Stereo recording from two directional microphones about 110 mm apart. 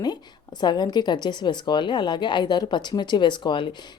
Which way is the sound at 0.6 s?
40° left (ahead or behind).